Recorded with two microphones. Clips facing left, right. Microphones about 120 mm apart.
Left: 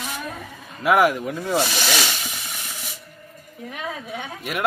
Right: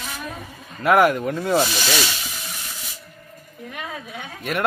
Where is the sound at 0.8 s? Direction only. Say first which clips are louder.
Right 2 dB; centre (ahead or behind).